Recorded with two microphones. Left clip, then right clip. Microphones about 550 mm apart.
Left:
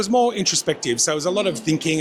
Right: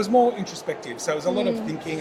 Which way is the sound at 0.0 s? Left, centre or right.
Left.